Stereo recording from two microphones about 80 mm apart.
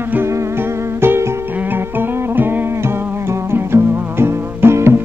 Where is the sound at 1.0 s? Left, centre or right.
Right.